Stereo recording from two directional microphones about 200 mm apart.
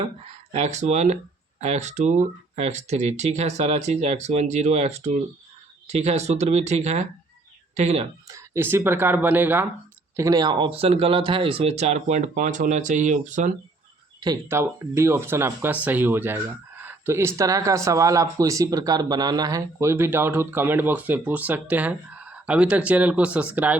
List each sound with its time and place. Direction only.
0.5 s speech: 35° right (ahead or behind)
8.3 s speech: 15° right (ahead or behind); by 13.5 s 40° right (ahead or behind)
14.4 s speech: 10° right (ahead or behind)